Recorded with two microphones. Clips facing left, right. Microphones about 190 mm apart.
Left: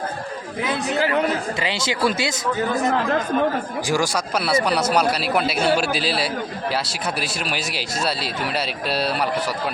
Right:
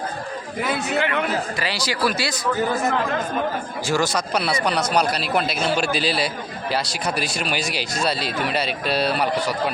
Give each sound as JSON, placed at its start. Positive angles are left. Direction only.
{"t": 0.6, "sound": "speech", "side_deg": 0}
{"t": 0.9, "sound": "speech", "side_deg": 35}
{"t": 1.5, "sound": "speech", "side_deg": 25}
{"t": 3.8, "sound": "speech", "side_deg": 10}